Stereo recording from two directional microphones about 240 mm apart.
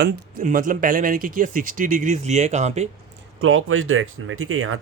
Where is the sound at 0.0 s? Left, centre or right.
Right.